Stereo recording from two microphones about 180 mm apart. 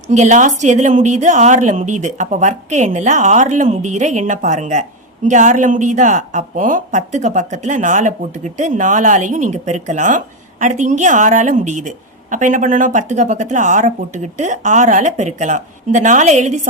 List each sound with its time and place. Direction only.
0.1 s a woman's voice: 40° right (ahead or behind)